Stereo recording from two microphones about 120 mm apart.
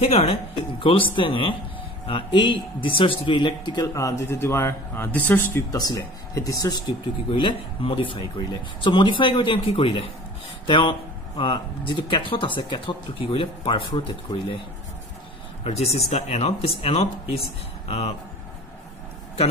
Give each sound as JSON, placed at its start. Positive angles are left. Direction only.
{"t": 0.1, "sound": "speech", "side_deg": 55}
{"t": 5.7, "sound": "speech", "side_deg": 30}
{"t": 7.2, "sound": "speech", "side_deg": 45}
{"t": 15.6, "sound": "speech", "side_deg": 60}